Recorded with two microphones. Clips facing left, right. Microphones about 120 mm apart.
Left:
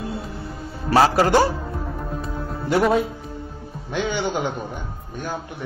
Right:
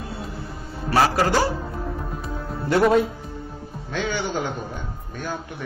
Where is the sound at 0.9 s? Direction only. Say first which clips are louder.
Left 3 dB; 20° left (ahead or behind).